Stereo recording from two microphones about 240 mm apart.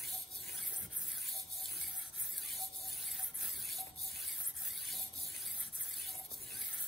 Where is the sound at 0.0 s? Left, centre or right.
Centre.